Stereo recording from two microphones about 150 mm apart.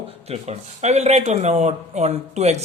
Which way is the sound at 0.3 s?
45° right (ahead or behind).